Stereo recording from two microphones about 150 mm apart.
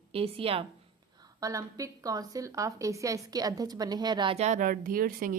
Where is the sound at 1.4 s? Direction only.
20° right (ahead or behind).